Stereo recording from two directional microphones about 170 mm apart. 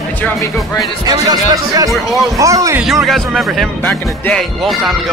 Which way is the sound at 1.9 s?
Centre (ahead or behind).